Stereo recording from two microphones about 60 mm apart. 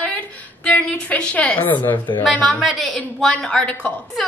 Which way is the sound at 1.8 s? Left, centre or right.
Left.